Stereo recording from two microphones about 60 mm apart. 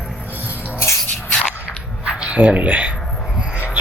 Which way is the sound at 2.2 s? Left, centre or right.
Right.